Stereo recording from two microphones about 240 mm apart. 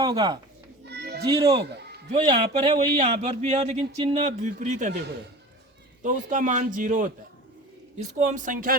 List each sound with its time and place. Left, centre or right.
0.0 s a child's voice: centre
0.9 s children playing: right
2.1 s speech: right
6.0 s speech: right